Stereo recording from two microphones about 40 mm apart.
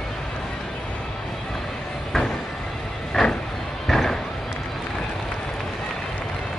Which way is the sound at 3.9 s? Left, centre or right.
Centre.